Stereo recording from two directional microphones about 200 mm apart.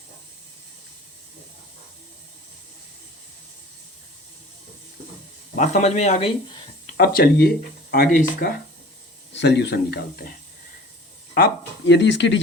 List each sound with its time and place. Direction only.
5.5 s speech: 35° left (ahead or behind)
6.9 s speech: 50° left (ahead or behind)
9.3 s speech: 60° left (ahead or behind)
11.3 s speech: 55° left (ahead or behind)